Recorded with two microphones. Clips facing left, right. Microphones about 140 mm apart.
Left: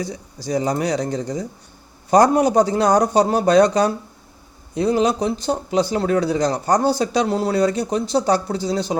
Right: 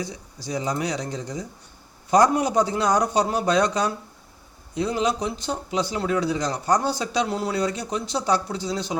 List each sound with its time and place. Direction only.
0.0 s speech: 40° left (ahead or behind)